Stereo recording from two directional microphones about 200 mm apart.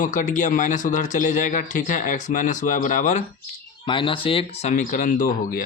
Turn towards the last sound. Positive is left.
turn(degrees=45)  # may be behind; listen again after turning